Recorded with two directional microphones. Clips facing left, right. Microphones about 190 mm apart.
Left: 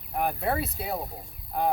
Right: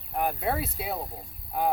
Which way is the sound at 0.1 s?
Centre (ahead or behind).